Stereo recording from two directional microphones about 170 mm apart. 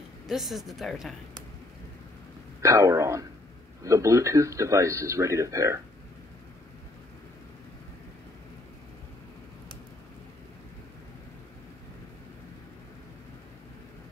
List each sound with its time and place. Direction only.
0.3 s a woman's voice: centre (ahead or behind)
2.6 s speech: 15° right (ahead or behind)